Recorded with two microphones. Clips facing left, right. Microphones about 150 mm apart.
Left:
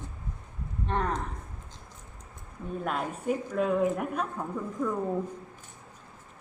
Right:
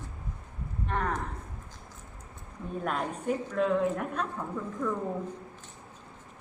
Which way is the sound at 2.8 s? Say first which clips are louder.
Even; 5° left (ahead or behind).